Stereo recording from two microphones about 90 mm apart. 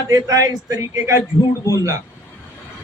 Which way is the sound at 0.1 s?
40° right (ahead or behind).